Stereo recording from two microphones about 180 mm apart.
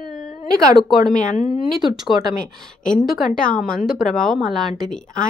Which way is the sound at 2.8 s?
45° left (ahead or behind).